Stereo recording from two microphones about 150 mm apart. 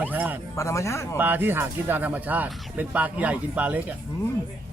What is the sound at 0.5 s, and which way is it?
Speech, 20° left (ahead or behind).